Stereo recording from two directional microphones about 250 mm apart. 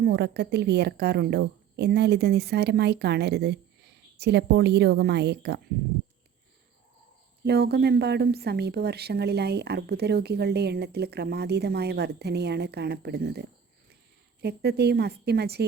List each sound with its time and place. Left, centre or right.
0.0 s a woman's voice: right
7.4 s a woman's voice: right
14.4 s a woman's voice: right